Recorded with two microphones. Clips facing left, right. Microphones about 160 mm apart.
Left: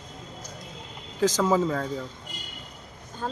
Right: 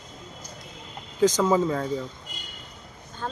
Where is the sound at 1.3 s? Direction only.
5° left (ahead or behind).